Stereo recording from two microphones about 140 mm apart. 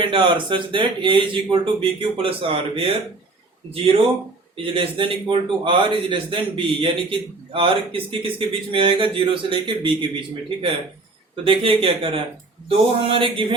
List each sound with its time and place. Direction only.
0.0 s a man's voice: 35° right (ahead or behind)
4.5 s a man's voice: 40° right (ahead or behind)